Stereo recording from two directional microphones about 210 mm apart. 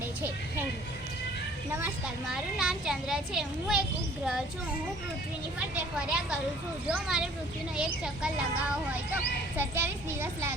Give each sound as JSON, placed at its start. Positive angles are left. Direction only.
{"t": 2.3, "sound": "speech", "side_deg": 0}
{"t": 5.5, "sound": "speech", "side_deg": -5}